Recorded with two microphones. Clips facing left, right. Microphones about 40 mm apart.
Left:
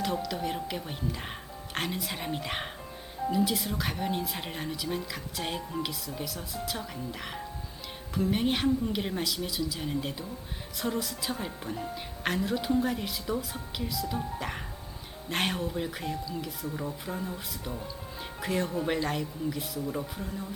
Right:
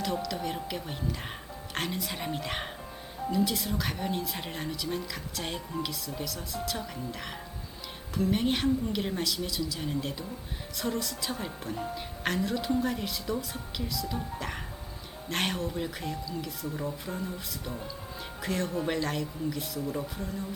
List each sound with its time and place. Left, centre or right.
0.0 s doorbell: centre
0.3 s speech: centre